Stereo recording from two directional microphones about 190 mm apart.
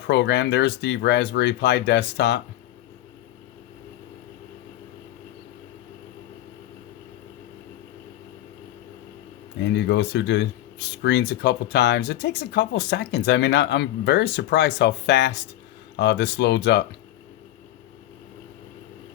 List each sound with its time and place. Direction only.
0.1 s speech: 65° left (ahead or behind)
9.7 s speech: 65° left (ahead or behind)